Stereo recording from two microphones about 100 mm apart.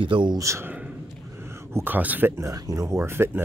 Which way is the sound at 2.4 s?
35° right (ahead or behind).